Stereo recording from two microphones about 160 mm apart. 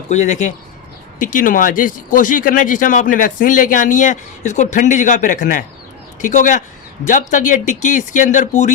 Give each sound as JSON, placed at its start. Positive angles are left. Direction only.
{"t": 0.1, "sound": "speech", "side_deg": 45}